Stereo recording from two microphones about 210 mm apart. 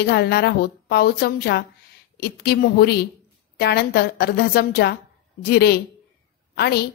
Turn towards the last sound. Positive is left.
turn(degrees=50)  # may be behind; listen again after turning